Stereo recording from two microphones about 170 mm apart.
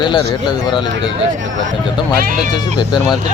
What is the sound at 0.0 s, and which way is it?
Speech, 25° left (ahead or behind).